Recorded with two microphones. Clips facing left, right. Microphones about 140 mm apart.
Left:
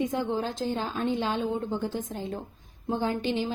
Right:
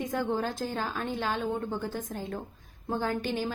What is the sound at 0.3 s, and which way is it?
Speech, 50° right (ahead or behind).